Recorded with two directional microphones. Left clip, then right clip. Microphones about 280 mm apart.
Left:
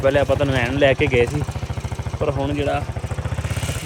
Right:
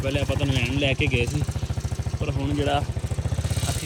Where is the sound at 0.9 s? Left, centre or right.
Centre.